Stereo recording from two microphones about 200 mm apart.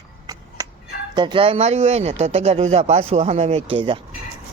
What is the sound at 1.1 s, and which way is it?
Speech, 25° right (ahead or behind).